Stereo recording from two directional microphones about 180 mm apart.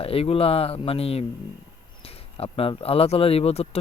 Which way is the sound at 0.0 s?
30° left (ahead or behind).